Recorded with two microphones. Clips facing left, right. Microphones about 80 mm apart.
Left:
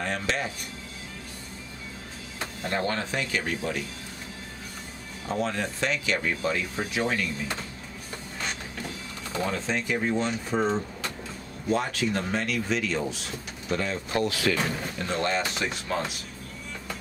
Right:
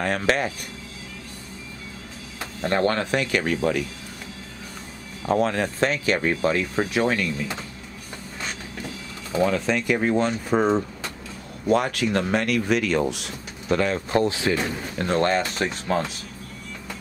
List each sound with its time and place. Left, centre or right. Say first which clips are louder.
0.0 s speech: right 6 dB; right
2.7 s speech: right 7 dB; right
5.3 s speech: right 7 dB; right
6.8 s speech: right 6 dB; right
9.5 s speech: right 6 dB; right
14.1 s speech: right 3 dB; right
15.0 s speech: right 7 dB; right